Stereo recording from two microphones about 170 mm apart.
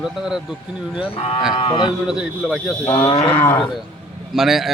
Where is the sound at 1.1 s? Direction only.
35° left (ahead or behind).